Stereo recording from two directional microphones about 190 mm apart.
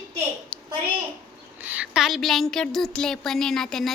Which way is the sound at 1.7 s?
Centre (ahead or behind).